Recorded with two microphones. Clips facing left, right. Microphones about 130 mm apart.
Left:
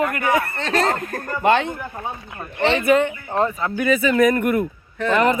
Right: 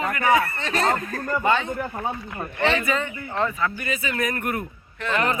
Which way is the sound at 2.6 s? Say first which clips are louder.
Left 3 dB; 30° left (ahead or behind).